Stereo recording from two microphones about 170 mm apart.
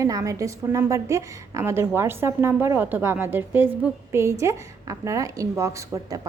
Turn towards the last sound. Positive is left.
turn(degrees=-20)  # may be behind; listen again after turning